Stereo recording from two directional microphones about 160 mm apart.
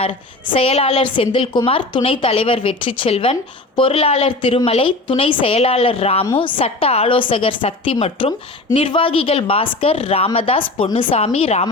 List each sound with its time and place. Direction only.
0.0 s speech: 35° left (ahead or behind)